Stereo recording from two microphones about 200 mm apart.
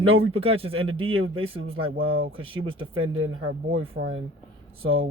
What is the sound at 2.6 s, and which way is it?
Speech, 25° right (ahead or behind).